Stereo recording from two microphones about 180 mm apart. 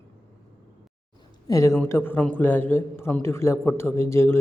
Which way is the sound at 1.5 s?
15° left (ahead or behind).